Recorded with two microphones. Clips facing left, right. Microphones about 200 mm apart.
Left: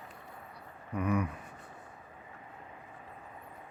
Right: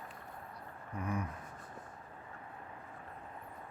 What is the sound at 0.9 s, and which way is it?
Speech, 70° left (ahead or behind).